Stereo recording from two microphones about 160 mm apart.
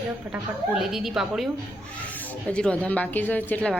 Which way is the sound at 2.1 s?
10° left (ahead or behind).